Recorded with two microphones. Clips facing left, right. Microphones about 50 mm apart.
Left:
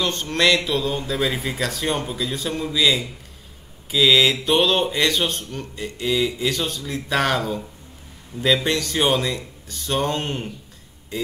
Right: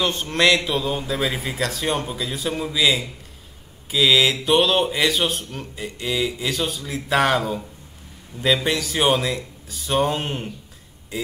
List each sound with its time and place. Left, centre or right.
0.0 s mantra: centre
0.7 s speech: centre